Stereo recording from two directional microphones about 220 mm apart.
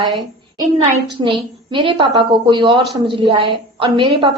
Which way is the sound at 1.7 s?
20° right (ahead or behind).